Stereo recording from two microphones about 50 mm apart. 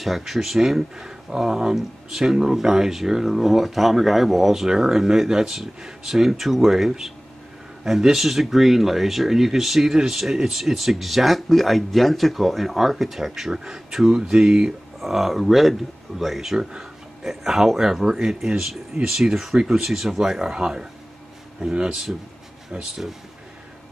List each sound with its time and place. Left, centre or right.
0.0 s speech: centre
15.0 s speech: centre